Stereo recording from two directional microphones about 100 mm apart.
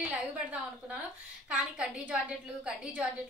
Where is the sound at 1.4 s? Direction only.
10° right (ahead or behind).